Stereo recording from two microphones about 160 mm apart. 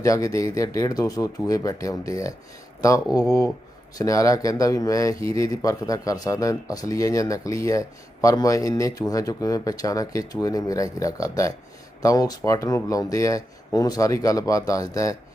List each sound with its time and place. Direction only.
0.0 s speech: 20° left (ahead or behind)